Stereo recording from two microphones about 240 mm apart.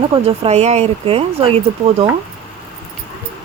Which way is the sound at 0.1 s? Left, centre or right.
Right.